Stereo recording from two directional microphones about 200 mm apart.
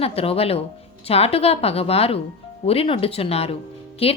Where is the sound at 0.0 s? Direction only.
30° left (ahead or behind).